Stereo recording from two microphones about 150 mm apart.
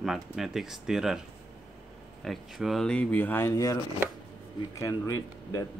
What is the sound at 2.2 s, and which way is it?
Speech, centre (ahead or behind).